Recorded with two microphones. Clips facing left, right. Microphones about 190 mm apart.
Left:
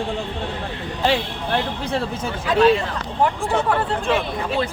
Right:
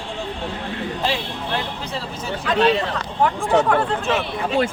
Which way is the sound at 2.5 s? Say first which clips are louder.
Left 2 dB; 10° left (ahead or behind).